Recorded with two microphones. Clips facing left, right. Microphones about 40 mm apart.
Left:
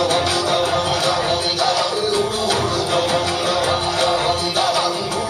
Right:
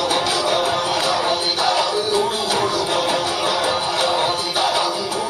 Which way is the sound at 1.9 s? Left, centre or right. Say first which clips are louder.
Even; centre.